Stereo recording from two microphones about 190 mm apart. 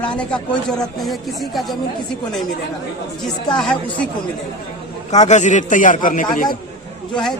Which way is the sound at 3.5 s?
5° left (ahead or behind).